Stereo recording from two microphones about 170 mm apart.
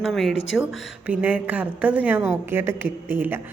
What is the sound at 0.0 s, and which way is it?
A woman's voice, centre (ahead or behind).